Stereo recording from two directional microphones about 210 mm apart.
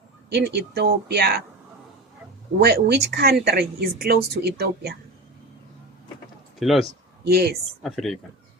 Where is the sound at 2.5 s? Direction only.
50° right (ahead or behind).